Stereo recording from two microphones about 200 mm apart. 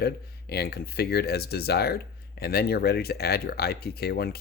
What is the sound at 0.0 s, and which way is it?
Speech, 55° left (ahead or behind).